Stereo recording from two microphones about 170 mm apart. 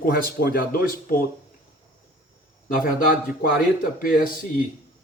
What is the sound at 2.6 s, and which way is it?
Speech, 55° left (ahead or behind).